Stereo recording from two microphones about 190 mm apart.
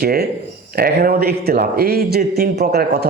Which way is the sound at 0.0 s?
55° right (ahead or behind).